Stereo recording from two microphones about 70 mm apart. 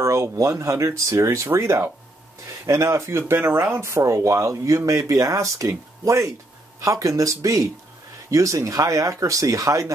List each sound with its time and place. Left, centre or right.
0.0 s speech: right